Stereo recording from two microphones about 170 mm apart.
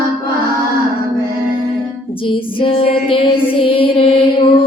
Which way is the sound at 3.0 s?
30° left (ahead or behind).